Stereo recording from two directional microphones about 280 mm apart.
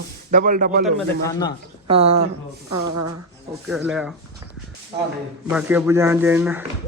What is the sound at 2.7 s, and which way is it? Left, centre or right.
Speech, right.